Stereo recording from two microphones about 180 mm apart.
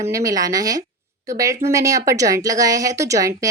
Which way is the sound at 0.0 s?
20° right (ahead or behind).